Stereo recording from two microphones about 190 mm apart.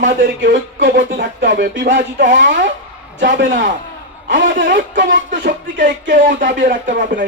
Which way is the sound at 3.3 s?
75° right (ahead or behind).